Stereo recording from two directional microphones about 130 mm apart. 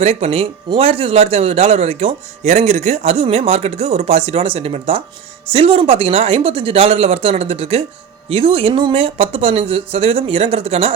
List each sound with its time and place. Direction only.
0.0 s a man's voice: 55° right (ahead or behind)